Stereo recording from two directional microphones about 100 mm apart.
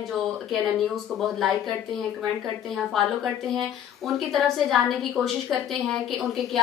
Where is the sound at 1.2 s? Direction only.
Centre (ahead or behind).